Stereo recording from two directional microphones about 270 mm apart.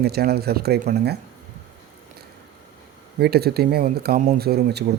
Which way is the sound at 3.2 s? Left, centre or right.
Right.